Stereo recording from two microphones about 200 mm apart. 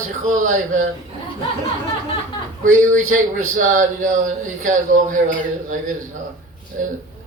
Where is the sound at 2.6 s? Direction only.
40° right (ahead or behind).